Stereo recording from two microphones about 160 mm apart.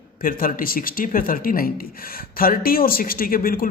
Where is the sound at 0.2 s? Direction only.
60° left (ahead or behind).